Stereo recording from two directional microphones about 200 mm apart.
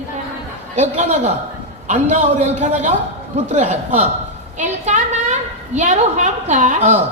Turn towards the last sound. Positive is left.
turn(degrees=-35)  # may be behind; listen again after turning